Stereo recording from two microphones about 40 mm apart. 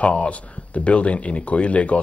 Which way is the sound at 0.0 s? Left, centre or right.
Left.